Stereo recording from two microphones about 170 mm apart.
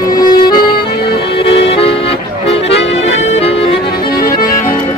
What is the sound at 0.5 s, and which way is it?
Accordion, 60° left (ahead or behind).